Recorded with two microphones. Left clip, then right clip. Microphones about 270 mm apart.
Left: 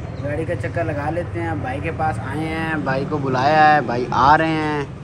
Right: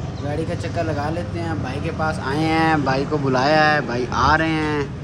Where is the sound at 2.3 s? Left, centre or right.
Right.